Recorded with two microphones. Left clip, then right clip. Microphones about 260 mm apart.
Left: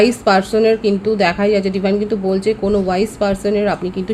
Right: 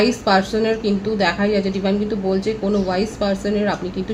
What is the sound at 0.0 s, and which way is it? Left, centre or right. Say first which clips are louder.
A woman's voice: left 4 dB; left.